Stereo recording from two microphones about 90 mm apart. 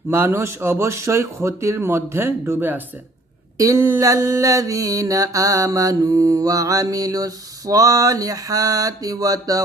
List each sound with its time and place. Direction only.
0.1 s a man's voice: 25° right (ahead or behind)
3.5 s speech: 35° right (ahead or behind)
4.0 s mantra: 40° right (ahead or behind)